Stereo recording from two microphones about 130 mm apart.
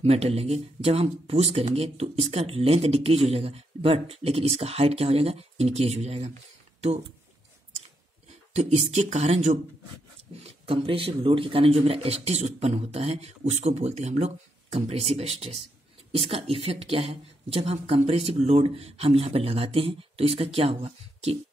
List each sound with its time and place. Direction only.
0.0 s speech: 55° right (ahead or behind)
8.3 s speech: 55° right (ahead or behind)
10.4 s speech: 50° right (ahead or behind)